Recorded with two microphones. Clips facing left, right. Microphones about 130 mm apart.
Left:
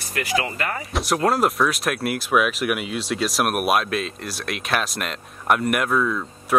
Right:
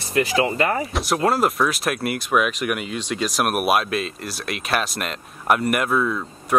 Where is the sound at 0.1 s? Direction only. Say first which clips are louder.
Right 5 dB; 25° right (ahead or behind).